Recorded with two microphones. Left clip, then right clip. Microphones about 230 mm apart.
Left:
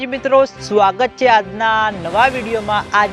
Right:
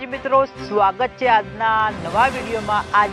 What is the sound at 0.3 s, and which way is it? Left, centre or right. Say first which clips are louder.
Speech: left 4 dB; left.